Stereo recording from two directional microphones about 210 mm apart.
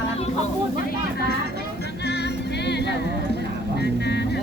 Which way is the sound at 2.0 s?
55° left (ahead or behind).